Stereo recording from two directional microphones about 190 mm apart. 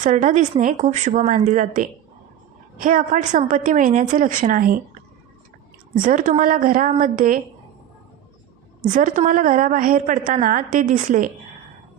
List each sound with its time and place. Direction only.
0.0 s a woman's voice: 40° right (ahead or behind)
6.0 s a woman's voice: 45° right (ahead or behind)
8.8 s a woman's voice: 40° right (ahead or behind)